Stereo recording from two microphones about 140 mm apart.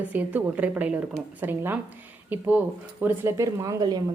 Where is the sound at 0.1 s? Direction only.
10° right (ahead or behind).